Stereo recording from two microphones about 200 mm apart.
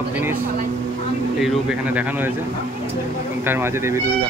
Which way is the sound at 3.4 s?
10° right (ahead or behind).